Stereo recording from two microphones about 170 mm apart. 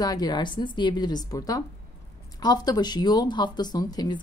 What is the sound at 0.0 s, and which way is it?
Speech, 25° left (ahead or behind).